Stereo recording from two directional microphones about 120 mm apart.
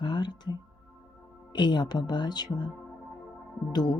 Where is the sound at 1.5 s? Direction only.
35° left (ahead or behind).